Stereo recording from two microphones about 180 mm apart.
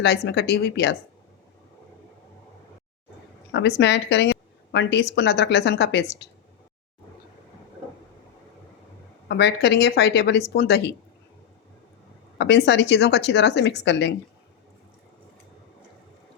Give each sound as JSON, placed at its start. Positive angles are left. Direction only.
{"t": 0.0, "sound": "speech", "side_deg": 65}
{"t": 3.5, "sound": "speech", "side_deg": 75}
{"t": 9.3, "sound": "speech", "side_deg": 70}
{"t": 12.4, "sound": "speech", "side_deg": 70}